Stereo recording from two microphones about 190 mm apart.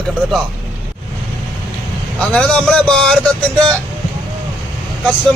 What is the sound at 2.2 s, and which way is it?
Speech, 5° left (ahead or behind).